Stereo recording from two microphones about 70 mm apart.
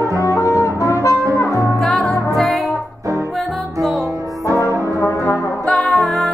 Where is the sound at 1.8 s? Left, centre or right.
Centre.